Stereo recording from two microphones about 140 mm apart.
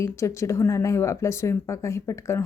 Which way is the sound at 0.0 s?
20° left (ahead or behind).